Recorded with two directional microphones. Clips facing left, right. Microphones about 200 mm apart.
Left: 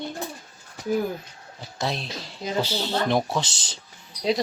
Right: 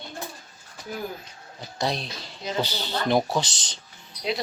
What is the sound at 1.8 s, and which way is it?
Speech, centre (ahead or behind).